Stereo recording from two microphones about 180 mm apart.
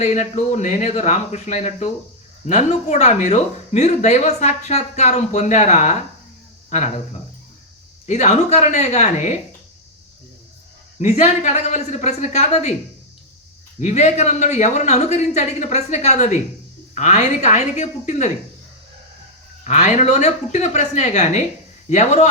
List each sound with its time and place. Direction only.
0.0 s speech: 40° left (ahead or behind)
8.0 s speech: 40° left (ahead or behind)
11.0 s speech: 40° left (ahead or behind)
13.7 s speech: 40° left (ahead or behind)
19.6 s speech: 40° left (ahead or behind)